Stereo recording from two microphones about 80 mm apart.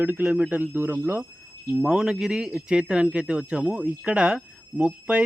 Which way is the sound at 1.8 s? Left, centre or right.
Centre.